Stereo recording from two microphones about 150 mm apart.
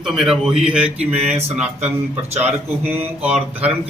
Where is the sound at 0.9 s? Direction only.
45° right (ahead or behind).